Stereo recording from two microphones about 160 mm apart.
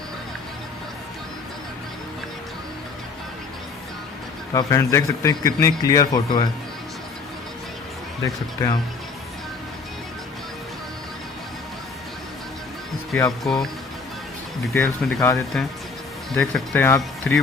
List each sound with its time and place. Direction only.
4.5 s a man's voice: 20° left (ahead or behind)
8.2 s a man's voice: 20° left (ahead or behind)
13.4 s speech: centre (ahead or behind)
14.7 s speech: 15° left (ahead or behind)
16.3 s speech: 5° left (ahead or behind)